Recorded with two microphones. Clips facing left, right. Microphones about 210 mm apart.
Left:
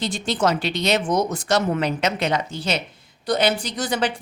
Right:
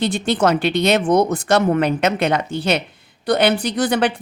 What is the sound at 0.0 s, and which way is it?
A woman's voice, 60° right (ahead or behind).